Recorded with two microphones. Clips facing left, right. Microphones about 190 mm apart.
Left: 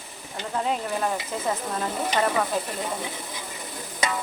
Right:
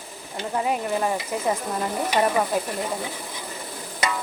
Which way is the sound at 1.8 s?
15° right (ahead or behind).